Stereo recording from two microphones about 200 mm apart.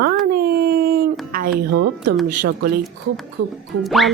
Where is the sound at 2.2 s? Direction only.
45° right (ahead or behind).